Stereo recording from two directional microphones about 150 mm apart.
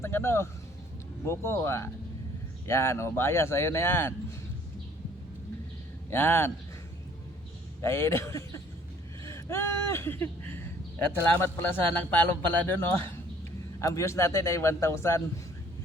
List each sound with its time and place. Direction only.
0.0 s a man's voice: 15° left (ahead or behind)
6.1 s a man's voice: 15° left (ahead or behind)
7.8 s a man's voice: 20° left (ahead or behind)